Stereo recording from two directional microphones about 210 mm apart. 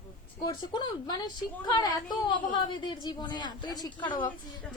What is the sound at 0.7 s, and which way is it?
A woman's voice, 20° left (ahead or behind).